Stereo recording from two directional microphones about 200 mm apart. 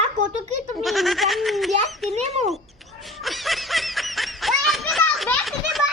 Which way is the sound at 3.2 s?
Centre (ahead or behind).